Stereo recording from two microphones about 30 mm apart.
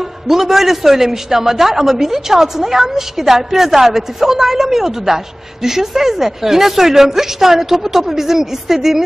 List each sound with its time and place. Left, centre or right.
0.0 s a man's voice: centre